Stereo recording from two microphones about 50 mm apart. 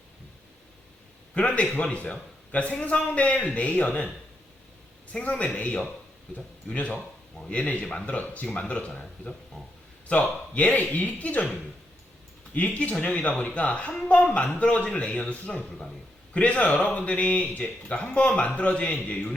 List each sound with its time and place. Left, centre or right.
1.3 s a man's voice: left
5.1 s speech: centre
5.5 s speech: left
8.9 s speech: centre
10.1 s speech: left
12.5 s speech: left